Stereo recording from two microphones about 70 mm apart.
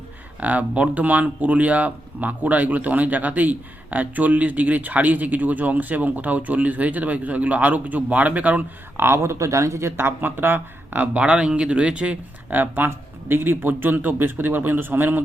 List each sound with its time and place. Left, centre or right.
0.3 s speech: right
9.0 s speech: right; by 12.1 s centre
12.5 s a man's voice: right